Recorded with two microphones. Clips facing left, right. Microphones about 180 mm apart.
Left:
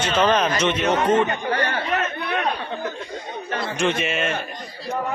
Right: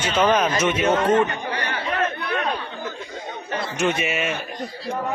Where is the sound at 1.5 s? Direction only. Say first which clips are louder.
Left 4 dB; 50° left (ahead or behind).